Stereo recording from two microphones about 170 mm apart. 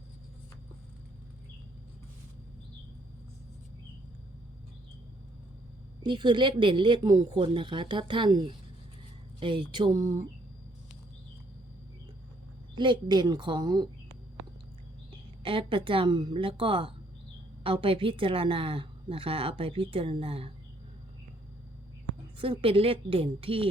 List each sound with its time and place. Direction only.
6.0 s speech: 25° right (ahead or behind)
12.7 s speech: 25° right (ahead or behind)
15.4 s a woman's voice: 30° right (ahead or behind)
22.4 s a woman's voice: 35° right (ahead or behind)